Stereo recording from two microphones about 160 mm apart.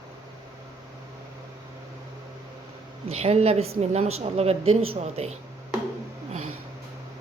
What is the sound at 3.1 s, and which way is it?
A woman's voice, 40° right (ahead or behind).